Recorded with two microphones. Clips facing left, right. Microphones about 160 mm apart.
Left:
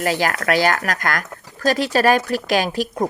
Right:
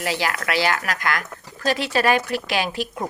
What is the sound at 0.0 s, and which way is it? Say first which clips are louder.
A woman's voice: left 4 dB; 45° left (ahead or behind).